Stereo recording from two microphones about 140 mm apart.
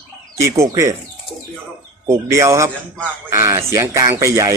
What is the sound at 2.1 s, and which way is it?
Speech, 20° right (ahead or behind).